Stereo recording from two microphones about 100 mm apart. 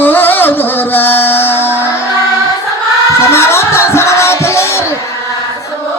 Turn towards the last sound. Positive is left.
turn(degrees=25)  # may be behind; listen again after turning